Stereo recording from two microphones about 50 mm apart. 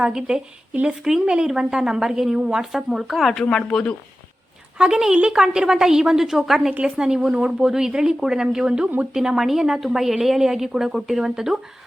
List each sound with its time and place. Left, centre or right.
0.0 s a woman's voice: centre
3.5 s speech: centre
4.8 s a woman's voice: centre